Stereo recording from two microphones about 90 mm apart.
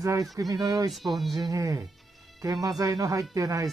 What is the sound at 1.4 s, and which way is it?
Speech, 35° right (ahead or behind).